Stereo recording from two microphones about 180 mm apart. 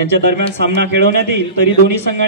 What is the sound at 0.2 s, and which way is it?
Speech, 65° right (ahead or behind).